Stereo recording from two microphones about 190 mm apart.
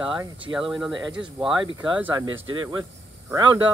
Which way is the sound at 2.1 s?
20° right (ahead or behind).